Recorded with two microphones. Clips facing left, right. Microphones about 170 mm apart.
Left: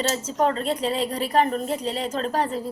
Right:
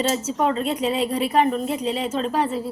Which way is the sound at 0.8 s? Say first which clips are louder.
Right 3 dB; 35° left (ahead or behind).